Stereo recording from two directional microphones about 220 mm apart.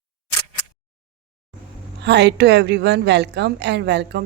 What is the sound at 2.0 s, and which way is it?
A woman's voice, 50° right (ahead or behind).